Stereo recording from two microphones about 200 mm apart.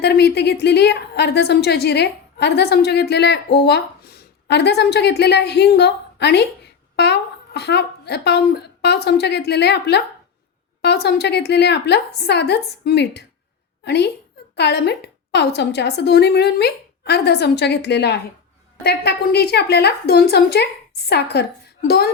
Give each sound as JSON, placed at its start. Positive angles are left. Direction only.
{"t": 0.0, "sound": "a woman's voice", "side_deg": 55}